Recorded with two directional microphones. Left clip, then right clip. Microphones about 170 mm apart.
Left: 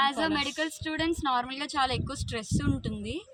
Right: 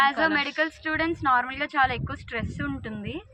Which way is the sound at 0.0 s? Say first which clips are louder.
Right 5 dB; 25° left (ahead or behind).